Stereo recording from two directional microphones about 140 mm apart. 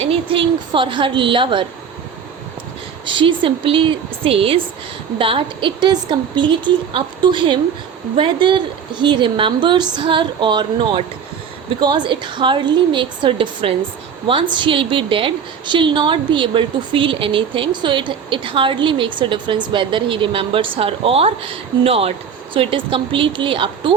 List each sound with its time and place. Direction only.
0.0 s a woman's voice: 40° right (ahead or behind)
3.1 s a woman's voice: 35° right (ahead or behind)